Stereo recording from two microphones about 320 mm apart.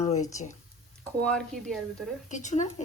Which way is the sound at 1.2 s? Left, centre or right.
Centre.